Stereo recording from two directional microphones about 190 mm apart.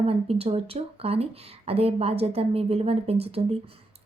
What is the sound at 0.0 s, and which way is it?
Speech, 30° right (ahead or behind).